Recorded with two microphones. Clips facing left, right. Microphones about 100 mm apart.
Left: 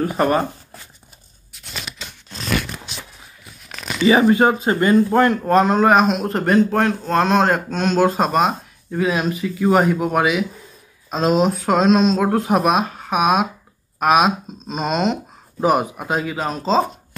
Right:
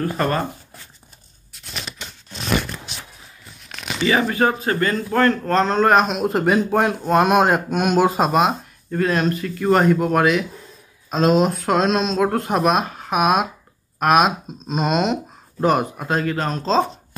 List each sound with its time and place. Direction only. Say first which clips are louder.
0.0 s speech: left 3 dB; 15° left (ahead or behind)
4.0 s a man's voice: left 5 dB; 20° left (ahead or behind); by 16.8 s 5° left (ahead or behind)